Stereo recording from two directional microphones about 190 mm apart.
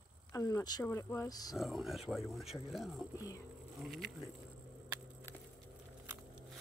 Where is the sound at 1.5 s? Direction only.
Centre (ahead or behind).